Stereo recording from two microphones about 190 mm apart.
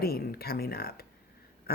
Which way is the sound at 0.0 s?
55° left (ahead or behind).